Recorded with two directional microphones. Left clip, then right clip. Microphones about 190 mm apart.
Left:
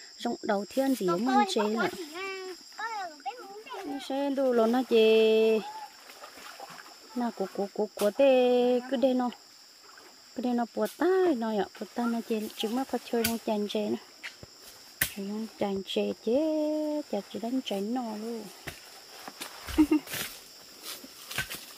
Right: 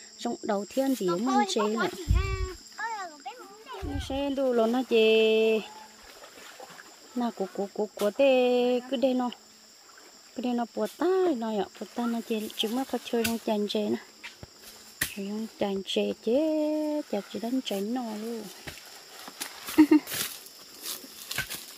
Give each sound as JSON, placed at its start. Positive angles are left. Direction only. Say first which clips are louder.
{"t": 0.2, "sound": "speech", "louder": "even", "side_deg": -5}
{"t": 0.9, "sound": "speech", "louder": "left 1 dB", "side_deg": 10}
{"t": 1.5, "sound": "speech", "louder": "right 1 dB", "side_deg": -5}
{"t": 1.8, "sound": "a sound", "louder": "right 1 dB", "side_deg": 15}
{"t": 2.8, "sound": "a child's voice", "louder": "even", "side_deg": 0}
{"t": 7.2, "sound": "speech", "louder": "right 1 dB", "side_deg": -15}
{"t": 15.1, "sound": "speech", "louder": "right 1 dB", "side_deg": -10}
{"t": 19.3, "sound": "a sound", "louder": "right 4 dB", "side_deg": -25}